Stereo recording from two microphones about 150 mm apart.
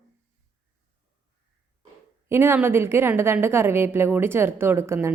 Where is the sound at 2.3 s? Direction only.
15° right (ahead or behind).